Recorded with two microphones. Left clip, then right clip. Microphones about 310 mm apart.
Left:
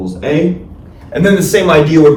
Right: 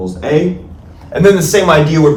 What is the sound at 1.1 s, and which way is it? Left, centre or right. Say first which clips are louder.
Speech: right 2 dB; centre.